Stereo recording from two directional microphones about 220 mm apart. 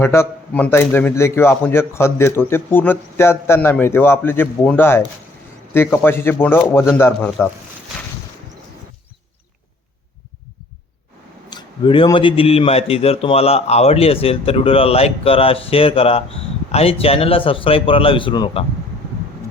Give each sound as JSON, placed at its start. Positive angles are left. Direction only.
{"t": 0.0, "sound": "a man's voice", "side_deg": 10}
{"t": 11.5, "sound": "a man's voice", "side_deg": 20}